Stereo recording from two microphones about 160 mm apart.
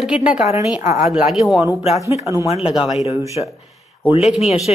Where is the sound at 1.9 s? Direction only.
20° right (ahead or behind).